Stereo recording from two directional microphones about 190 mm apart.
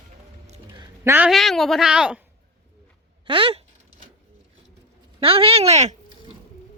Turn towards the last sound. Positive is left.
turn(degrees=-35)  # may be behind; listen again after turning